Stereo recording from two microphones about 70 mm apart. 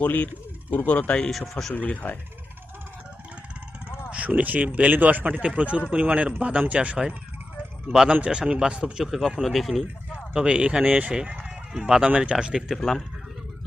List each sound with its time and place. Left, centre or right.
0.0 s speech: left
1.3 s speech: centre
1.7 s speech: left
4.1 s speech: right
9.0 s speech: centre
10.3 s speech: centre
12.7 s speech: centre